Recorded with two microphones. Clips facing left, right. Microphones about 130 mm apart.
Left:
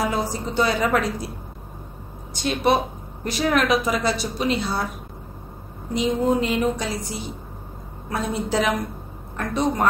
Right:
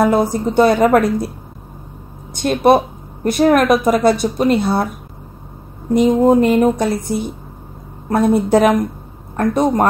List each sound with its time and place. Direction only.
0.0 s a woman's voice: 55° right (ahead or behind)
2.3 s a woman's voice: 50° right (ahead or behind)
5.9 s a woman's voice: 55° right (ahead or behind)